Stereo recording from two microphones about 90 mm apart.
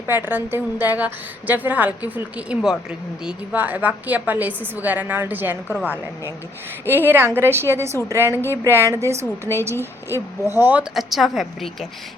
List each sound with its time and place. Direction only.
0.1 s a woman's voice: 20° right (ahead or behind)
6.8 s a woman's voice: 25° right (ahead or behind)
10.9 s a woman's voice: centre (ahead or behind)